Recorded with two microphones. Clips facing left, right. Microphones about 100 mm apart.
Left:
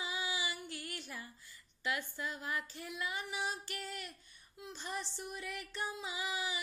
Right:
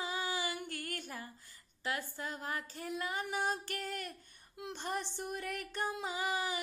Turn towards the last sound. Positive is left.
turn(degrees=-50)  # may be behind; listen again after turning